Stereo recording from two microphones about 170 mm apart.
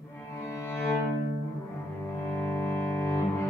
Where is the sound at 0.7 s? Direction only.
15° left (ahead or behind).